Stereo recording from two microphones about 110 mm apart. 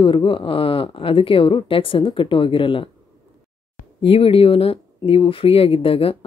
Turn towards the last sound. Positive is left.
turn(degrees=60)  # may be behind; listen again after turning